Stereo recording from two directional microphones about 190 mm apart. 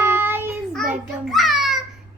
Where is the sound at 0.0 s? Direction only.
10° right (ahead or behind).